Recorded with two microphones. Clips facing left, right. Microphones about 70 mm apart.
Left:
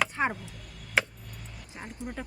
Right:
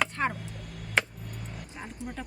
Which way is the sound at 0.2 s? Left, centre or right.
Centre.